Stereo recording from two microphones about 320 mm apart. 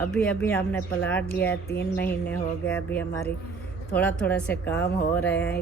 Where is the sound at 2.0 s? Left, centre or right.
Centre.